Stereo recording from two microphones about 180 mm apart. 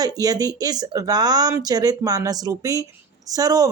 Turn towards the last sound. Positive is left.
turn(degrees=-20)  # may be behind; listen again after turning